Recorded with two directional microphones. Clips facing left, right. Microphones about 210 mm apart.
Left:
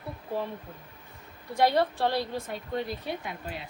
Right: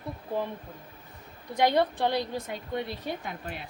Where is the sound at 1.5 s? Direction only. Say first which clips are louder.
Even; 20° right (ahead or behind).